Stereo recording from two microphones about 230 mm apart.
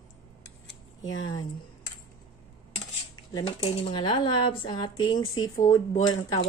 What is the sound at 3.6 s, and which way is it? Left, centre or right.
Speech, left.